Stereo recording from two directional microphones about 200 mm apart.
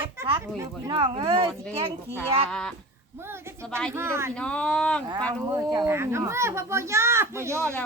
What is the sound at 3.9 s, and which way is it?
Speech, 10° right (ahead or behind).